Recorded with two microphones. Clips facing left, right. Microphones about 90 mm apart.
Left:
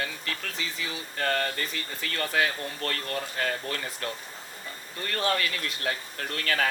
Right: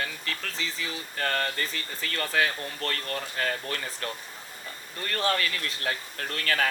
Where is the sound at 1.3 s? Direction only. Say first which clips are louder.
Left 1 dB; 40° right (ahead or behind).